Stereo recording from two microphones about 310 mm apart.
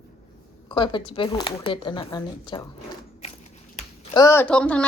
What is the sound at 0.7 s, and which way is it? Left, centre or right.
Speech, centre.